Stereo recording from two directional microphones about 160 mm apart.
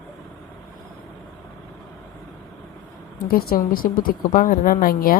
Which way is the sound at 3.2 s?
65° left (ahead or behind).